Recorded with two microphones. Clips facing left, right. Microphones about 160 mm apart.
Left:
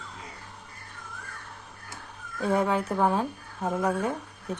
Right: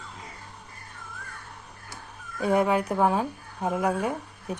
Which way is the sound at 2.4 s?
10° right (ahead or behind).